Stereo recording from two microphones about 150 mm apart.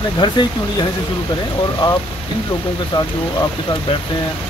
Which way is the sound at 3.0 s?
25° left (ahead or behind).